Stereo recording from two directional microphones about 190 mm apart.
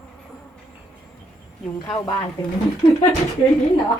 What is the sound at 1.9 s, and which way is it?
Speech, 25° left (ahead or behind).